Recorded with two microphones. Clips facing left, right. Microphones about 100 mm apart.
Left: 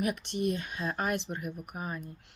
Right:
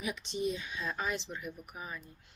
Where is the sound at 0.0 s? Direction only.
60° left (ahead or behind).